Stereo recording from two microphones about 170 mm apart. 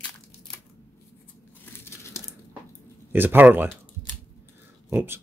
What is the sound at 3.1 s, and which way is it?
Speech, 10° right (ahead or behind).